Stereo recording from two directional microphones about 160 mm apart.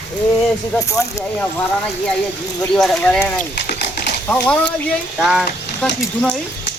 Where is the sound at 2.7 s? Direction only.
5° left (ahead or behind).